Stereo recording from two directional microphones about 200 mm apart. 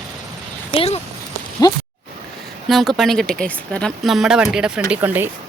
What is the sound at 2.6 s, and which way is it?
Speech, centre (ahead or behind).